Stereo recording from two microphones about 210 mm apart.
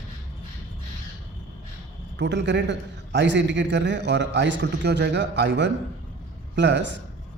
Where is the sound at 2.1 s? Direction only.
55° right (ahead or behind).